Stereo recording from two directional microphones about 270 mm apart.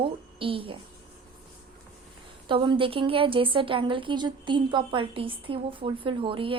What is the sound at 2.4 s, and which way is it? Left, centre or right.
A woman's voice, centre.